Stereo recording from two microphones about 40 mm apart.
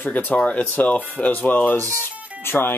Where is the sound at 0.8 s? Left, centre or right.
Left.